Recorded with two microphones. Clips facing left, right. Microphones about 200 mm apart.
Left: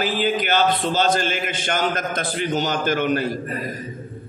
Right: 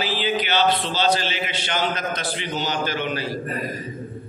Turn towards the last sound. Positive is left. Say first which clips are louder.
# left 5 dB
turn(degrees=50)  # may be behind; listen again after turning